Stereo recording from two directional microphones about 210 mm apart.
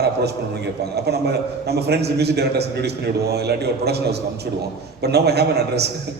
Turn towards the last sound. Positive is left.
turn(degrees=-50)  # may be behind; listen again after turning